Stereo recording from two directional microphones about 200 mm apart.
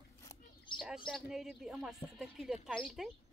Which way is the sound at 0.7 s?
25° left (ahead or behind).